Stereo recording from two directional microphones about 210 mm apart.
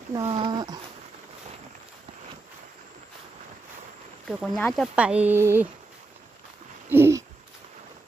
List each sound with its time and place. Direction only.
0.1 s speech: 20° right (ahead or behind)
4.3 s speech: centre (ahead or behind)
6.9 s a sound: 10° right (ahead or behind)